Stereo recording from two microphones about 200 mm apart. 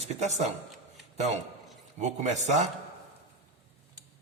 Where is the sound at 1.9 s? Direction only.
35° right (ahead or behind).